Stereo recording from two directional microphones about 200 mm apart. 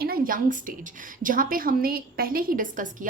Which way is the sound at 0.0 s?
45° right (ahead or behind).